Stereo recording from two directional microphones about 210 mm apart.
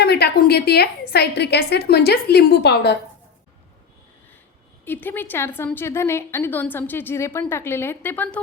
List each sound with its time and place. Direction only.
0.0 s a woman's voice: 50° left (ahead or behind)
4.9 s a woman's voice: 10° left (ahead or behind)